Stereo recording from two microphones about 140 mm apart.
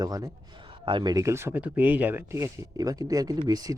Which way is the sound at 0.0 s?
25° right (ahead or behind).